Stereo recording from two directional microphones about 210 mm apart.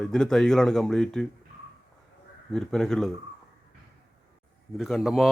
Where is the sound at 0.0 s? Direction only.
5° left (ahead or behind).